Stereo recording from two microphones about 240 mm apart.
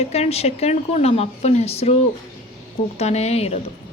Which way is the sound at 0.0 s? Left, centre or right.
Left.